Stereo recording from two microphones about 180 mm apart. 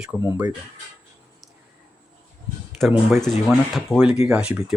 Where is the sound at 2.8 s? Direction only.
Centre (ahead or behind).